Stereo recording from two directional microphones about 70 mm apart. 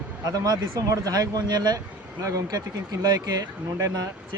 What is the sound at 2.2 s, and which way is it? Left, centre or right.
Speech, right.